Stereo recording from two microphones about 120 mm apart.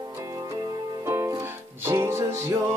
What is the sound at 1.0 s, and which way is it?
Music, 25° right (ahead or behind).